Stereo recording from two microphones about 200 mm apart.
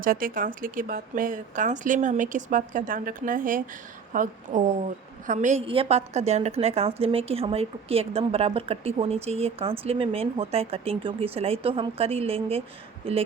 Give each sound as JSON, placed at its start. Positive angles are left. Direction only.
{"t": 0.0, "sound": "a woman's voice", "side_deg": -45}